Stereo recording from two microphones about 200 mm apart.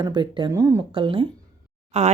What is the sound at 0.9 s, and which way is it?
A woman's voice, 25° right (ahead or behind).